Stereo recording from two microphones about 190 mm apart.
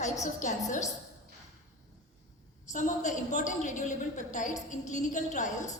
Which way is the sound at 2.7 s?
40° left (ahead or behind).